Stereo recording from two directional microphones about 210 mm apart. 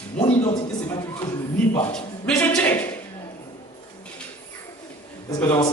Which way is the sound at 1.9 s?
5° left (ahead or behind).